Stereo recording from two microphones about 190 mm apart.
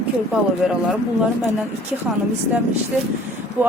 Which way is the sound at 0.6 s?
5° right (ahead or behind).